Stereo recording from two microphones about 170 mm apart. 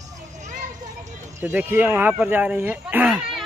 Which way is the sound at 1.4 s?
10° right (ahead or behind).